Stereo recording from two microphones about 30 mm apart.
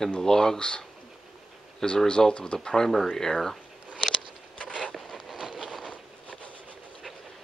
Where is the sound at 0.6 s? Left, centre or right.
Left.